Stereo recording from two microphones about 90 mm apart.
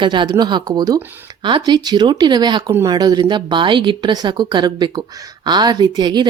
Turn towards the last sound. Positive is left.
turn(degrees=-50)  # may be behind; listen again after turning